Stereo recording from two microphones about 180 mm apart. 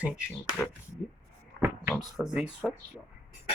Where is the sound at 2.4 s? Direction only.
5° right (ahead or behind).